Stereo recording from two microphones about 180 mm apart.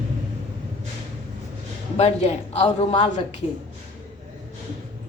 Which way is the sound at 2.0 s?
35° left (ahead or behind).